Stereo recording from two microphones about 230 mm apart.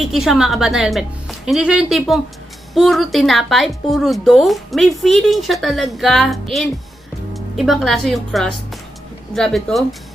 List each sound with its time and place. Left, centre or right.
0.1 s speech: centre